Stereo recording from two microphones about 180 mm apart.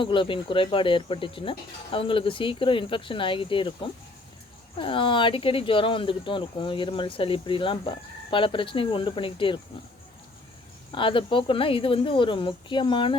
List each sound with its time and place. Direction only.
0.0 s speech: 30° left (ahead or behind)
4.8 s speech: 30° left (ahead or behind)
10.9 s speech: 30° left (ahead or behind)